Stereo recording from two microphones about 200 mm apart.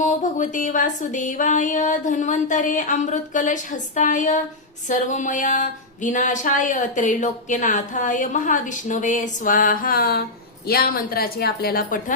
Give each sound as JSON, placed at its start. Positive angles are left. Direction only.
{"t": 0.0, "sound": "a woman's voice", "side_deg": 40}